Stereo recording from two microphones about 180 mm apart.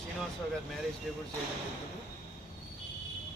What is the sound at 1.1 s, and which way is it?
Speech, centre (ahead or behind).